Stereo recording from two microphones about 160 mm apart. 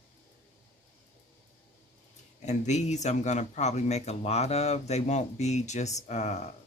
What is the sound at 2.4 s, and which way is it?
Speech, 45° left (ahead or behind).